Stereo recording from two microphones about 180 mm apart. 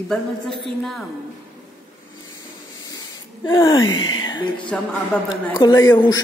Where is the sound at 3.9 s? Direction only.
90° left.